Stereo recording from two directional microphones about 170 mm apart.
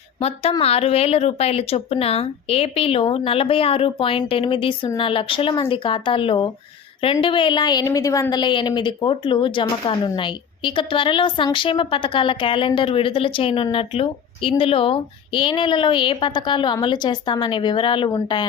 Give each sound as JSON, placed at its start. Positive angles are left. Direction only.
{"t": 0.2, "sound": "a woman's voice", "side_deg": 35}